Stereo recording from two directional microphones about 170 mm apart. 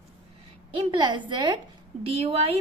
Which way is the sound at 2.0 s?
35° right (ahead or behind).